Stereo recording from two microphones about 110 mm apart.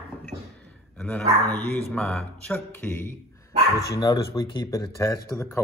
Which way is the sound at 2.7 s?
20° left (ahead or behind).